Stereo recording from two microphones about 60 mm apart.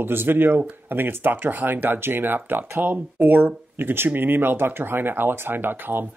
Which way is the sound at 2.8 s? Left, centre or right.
Right.